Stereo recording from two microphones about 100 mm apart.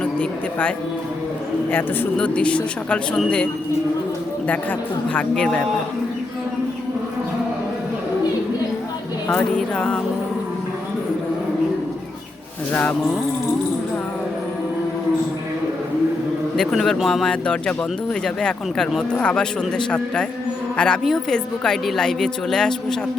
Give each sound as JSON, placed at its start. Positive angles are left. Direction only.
{"t": 0.0, "sound": "speech", "side_deg": 10}
{"t": 2.1, "sound": "speech", "side_deg": 10}
{"t": 5.1, "sound": "speech", "side_deg": 10}
{"t": 9.3, "sound": "speech", "side_deg": 10}
{"t": 16.6, "sound": "speech", "side_deg": 5}